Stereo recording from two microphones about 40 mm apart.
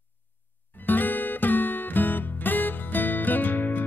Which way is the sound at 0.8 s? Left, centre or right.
Left.